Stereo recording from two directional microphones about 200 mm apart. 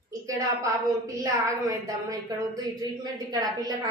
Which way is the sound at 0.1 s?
15° right (ahead or behind).